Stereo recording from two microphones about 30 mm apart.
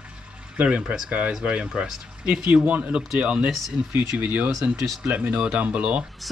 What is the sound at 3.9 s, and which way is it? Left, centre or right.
Speech, right.